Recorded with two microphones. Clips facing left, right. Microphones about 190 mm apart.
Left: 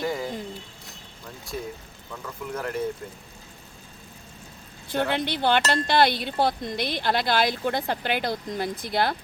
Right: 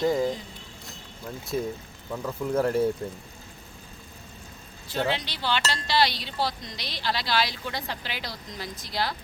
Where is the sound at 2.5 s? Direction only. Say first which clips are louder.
Right 7 dB; 30° right (ahead or behind).